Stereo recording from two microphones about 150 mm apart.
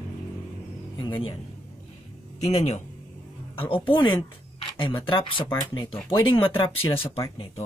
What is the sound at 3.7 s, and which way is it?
Speech, 35° left (ahead or behind).